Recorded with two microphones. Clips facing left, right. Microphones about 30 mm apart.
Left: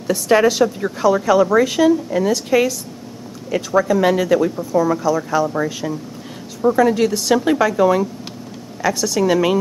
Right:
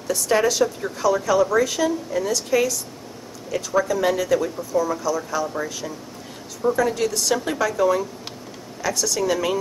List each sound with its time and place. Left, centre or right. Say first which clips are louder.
0.1 s a woman's voice: left 5 dB; left
6.8 s a woman's voice: left 6 dB; left
9.2 s a woman's voice: left 7 dB; left